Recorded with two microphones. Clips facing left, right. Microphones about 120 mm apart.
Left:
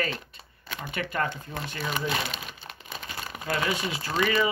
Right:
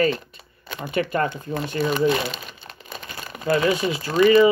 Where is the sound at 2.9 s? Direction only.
Centre (ahead or behind).